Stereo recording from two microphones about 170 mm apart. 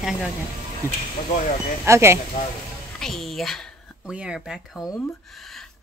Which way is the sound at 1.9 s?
15° right (ahead or behind).